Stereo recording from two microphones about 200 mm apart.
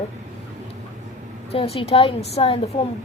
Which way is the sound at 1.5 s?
30° left (ahead or behind).